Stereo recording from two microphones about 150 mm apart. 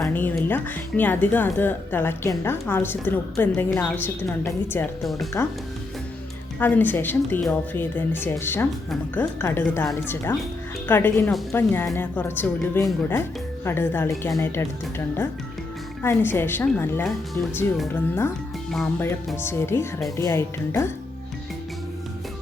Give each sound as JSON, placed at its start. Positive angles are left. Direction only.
{"t": 0.1, "sound": "speech", "side_deg": 10}
{"t": 6.6, "sound": "speech", "side_deg": 15}
{"t": 10.8, "sound": "speech", "side_deg": 15}
{"t": 19.4, "sound": "speech", "side_deg": 15}